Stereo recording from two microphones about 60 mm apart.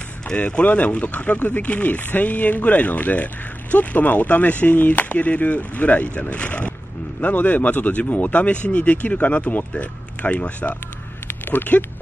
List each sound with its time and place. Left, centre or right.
0.3 s speech: centre